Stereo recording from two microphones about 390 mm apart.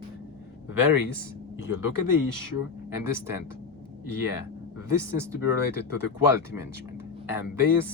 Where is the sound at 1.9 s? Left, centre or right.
Left.